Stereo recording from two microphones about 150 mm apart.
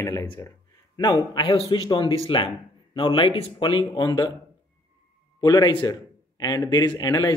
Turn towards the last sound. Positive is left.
turn(degrees=25)  # may be behind; listen again after turning